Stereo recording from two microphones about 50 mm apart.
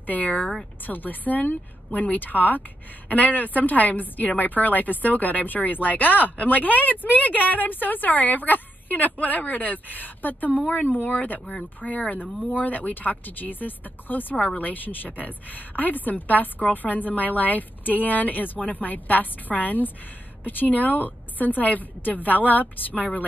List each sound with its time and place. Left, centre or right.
0.0 s a woman's voice: left
14.3 s a woman's voice: left